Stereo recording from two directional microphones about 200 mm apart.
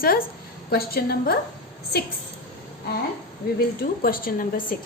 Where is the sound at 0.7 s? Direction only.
50° left (ahead or behind).